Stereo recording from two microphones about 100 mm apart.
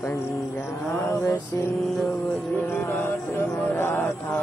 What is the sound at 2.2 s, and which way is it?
Music, 25° left (ahead or behind).